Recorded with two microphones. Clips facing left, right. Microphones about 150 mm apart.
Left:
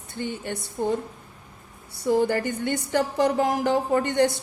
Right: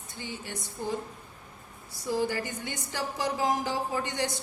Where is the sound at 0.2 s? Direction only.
55° left (ahead or behind).